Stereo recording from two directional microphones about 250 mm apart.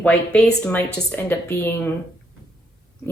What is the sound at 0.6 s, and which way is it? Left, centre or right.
A woman's voice, centre.